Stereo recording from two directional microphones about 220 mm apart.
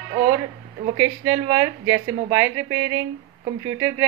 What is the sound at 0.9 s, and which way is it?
A woman's voice, 15° right (ahead or behind).